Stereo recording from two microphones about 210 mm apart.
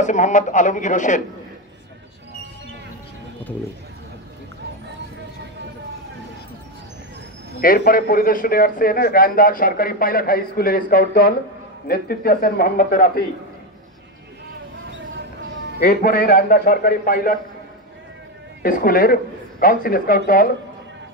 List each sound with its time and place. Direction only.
0.0 s a man's voice: 35° left (ahead or behind)
7.6 s a man's voice: 45° left (ahead or behind)
15.8 s a man's voice: 45° left (ahead or behind)
18.6 s a man's voice: 40° left (ahead or behind)